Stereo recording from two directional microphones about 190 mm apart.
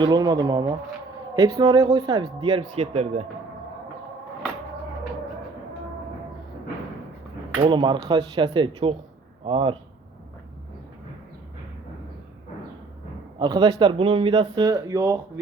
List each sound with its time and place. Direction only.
0.0 s speech: 20° right (ahead or behind)
7.6 s speech: 25° right (ahead or behind)
13.4 s speech: 20° right (ahead or behind)